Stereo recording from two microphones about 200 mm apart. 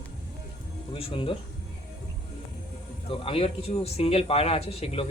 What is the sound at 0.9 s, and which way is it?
Speech, 30° left (ahead or behind).